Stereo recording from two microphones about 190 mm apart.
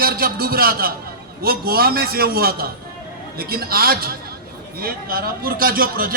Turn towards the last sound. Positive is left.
turn(degrees=-50)  # may be behind; listen again after turning